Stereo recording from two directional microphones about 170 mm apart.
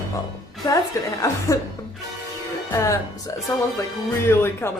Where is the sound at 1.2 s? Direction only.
20° left (ahead or behind).